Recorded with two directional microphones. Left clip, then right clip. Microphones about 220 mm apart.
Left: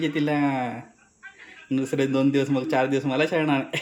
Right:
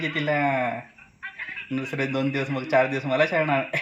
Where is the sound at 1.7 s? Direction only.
10° left (ahead or behind).